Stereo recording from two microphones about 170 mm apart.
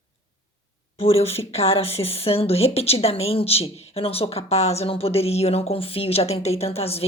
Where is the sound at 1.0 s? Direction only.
35° left (ahead or behind).